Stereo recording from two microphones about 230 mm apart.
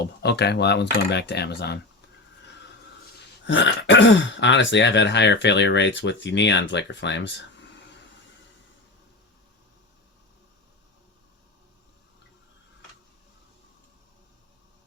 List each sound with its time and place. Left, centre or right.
0.0 s speech: left
3.4 s speech: left